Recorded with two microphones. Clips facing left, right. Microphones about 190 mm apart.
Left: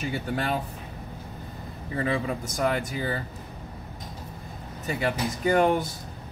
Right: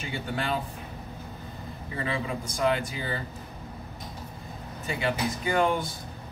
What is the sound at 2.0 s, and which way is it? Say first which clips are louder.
Speech: left 3 dB; 40° left (ahead or behind).